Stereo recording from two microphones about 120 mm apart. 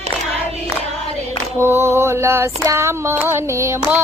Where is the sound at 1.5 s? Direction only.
20° right (ahead or behind).